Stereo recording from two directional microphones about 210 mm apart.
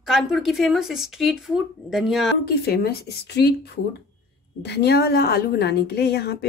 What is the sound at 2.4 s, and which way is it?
A woman's voice, 50° left (ahead or behind).